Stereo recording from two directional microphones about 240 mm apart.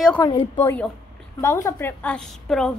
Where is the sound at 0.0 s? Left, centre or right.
Centre.